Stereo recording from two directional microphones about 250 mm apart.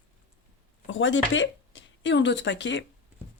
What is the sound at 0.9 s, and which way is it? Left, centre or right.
Speech, left.